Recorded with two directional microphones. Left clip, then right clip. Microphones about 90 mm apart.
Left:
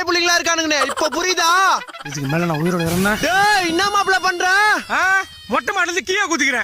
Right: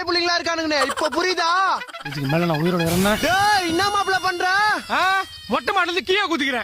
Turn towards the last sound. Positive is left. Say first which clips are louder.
# left 3 dB
turn(degrees=5)  # may be behind; listen again after turning